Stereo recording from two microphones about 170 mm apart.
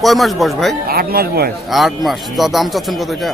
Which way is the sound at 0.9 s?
60° right (ahead or behind).